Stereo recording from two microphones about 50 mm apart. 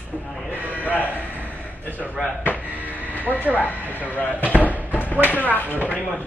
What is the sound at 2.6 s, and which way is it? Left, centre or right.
Music, right.